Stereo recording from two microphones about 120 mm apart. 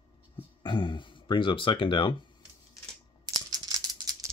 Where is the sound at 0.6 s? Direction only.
45° left (ahead or behind).